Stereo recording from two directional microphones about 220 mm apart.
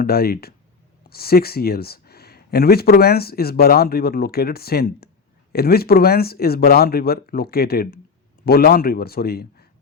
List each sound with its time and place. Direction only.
0.0 s speech: 45° left (ahead or behind)